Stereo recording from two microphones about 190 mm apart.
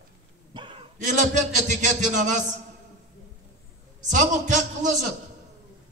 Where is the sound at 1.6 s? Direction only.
40° right (ahead or behind).